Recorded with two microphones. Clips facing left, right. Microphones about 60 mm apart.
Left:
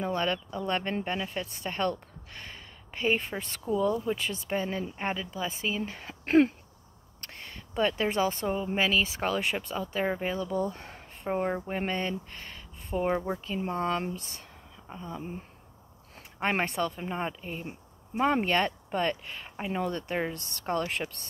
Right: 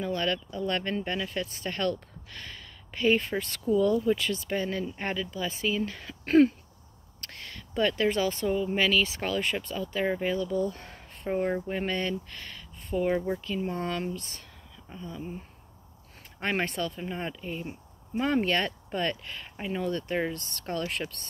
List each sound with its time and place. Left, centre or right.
0.0 s speech: left
8.0 s speech: left
11.6 s speech: left
14.1 s speech: right
14.9 s speech: left
15.1 s a sound: left
16.3 s speech: left